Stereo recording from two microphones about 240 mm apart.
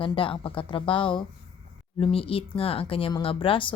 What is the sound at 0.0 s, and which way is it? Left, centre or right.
A woman's voice, left.